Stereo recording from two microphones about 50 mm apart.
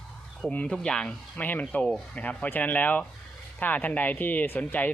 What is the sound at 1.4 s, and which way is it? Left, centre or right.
Speech, left.